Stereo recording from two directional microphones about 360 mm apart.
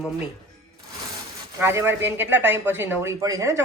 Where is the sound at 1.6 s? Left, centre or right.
Centre.